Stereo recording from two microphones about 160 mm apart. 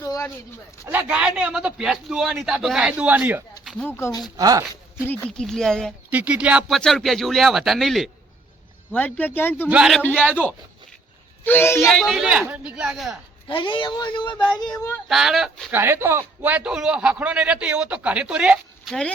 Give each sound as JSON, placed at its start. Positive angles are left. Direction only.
{"t": 0.0, "sound": "a sound", "side_deg": 20}
{"t": 0.9, "sound": "a man's voice", "side_deg": -10}
{"t": 3.6, "sound": "a sound", "side_deg": 0}
{"t": 3.8, "sound": "speech", "side_deg": 15}
{"t": 4.4, "sound": "speech", "side_deg": -20}
{"t": 5.0, "sound": "a man's voice", "side_deg": 10}
{"t": 6.1, "sound": "a man's voice", "side_deg": -10}
{"t": 9.6, "sound": "a man's voice", "side_deg": -5}
{"t": 11.4, "sound": "speech", "side_deg": 15}
{"t": 11.9, "sound": "a man's voice", "side_deg": 0}
{"t": 13.5, "sound": "speech", "side_deg": 30}
{"t": 15.1, "sound": "a man's voice", "side_deg": 0}
{"t": 15.7, "sound": "a man's voice", "side_deg": -15}